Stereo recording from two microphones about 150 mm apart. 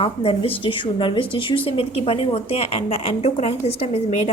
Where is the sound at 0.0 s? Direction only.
40° left (ahead or behind).